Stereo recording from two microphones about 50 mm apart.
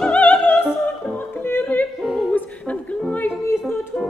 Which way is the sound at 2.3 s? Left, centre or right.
Left.